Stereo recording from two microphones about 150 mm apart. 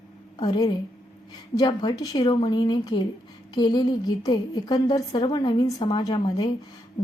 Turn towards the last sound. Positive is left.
turn(degrees=30)  # may be behind; listen again after turning